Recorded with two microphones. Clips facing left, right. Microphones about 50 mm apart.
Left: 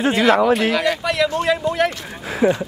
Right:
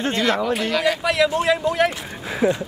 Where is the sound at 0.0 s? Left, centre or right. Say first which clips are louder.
Left 6 dB; centre.